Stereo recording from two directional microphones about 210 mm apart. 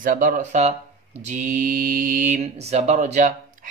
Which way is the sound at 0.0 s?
40° right (ahead or behind).